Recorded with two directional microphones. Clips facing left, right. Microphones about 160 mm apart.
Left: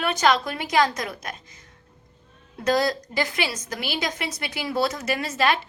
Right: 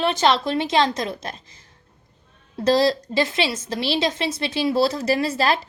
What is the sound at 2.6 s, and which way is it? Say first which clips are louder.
A woman's voice: right 4 dB; 30° right (ahead or behind).